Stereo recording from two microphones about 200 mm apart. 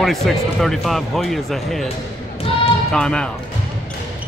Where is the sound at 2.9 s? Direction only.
5° left (ahead or behind).